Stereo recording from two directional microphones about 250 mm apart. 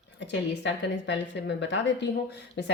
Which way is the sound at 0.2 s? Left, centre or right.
Left.